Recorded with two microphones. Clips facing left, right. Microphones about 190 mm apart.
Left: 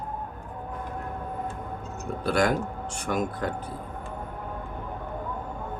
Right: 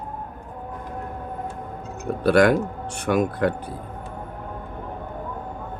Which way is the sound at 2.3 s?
65° right (ahead or behind).